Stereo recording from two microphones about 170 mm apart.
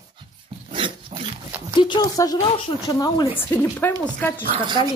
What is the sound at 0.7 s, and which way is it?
Dog, 30° right (ahead or behind).